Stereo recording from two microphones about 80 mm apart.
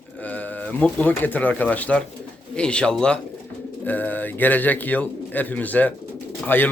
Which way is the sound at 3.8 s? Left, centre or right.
Left.